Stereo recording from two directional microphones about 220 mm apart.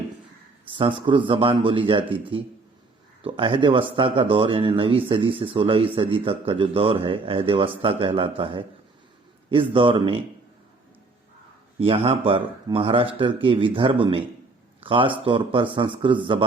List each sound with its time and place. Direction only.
0.7 s speech: 20° right (ahead or behind)
9.7 s speech: 25° right (ahead or behind)
11.8 s speech: 25° right (ahead or behind)